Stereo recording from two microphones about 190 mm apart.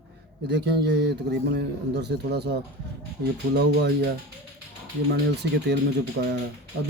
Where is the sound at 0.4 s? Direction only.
60° right (ahead or behind).